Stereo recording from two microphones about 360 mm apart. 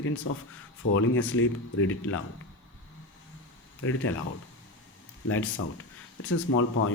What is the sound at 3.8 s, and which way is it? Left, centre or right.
Speech, left.